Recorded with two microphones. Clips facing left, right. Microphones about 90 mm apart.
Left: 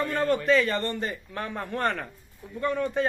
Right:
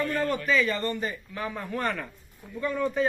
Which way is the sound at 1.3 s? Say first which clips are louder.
Even; 55° left (ahead or behind).